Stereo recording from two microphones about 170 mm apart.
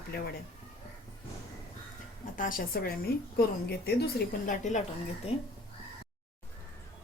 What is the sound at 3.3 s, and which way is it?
Speech, 70° left (ahead or behind).